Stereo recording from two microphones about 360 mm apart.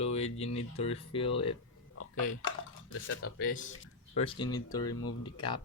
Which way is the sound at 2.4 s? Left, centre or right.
Left.